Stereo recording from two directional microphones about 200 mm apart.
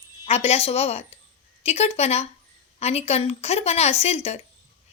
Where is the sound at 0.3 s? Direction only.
30° left (ahead or behind).